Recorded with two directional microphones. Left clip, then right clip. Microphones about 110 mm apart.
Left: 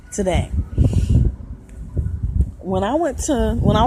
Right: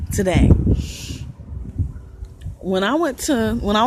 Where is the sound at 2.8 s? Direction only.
50° right (ahead or behind).